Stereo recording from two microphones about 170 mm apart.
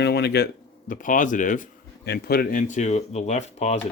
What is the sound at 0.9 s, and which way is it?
Speech, 50° left (ahead or behind).